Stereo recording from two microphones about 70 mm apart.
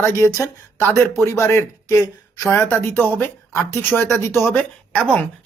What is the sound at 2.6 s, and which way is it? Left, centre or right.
Speech, left.